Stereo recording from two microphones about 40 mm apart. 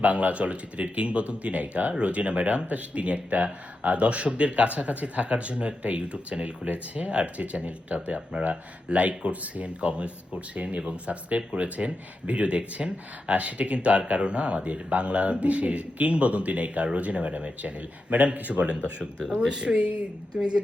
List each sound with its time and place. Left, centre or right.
0.0 s speech: right
19.4 s speech: right